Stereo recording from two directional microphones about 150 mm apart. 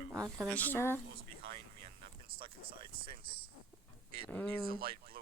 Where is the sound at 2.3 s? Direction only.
35° right (ahead or behind).